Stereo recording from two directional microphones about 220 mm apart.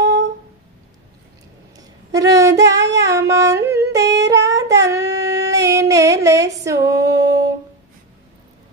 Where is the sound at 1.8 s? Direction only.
15° right (ahead or behind).